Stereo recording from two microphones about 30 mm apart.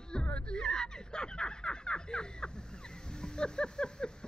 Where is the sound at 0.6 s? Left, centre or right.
Left.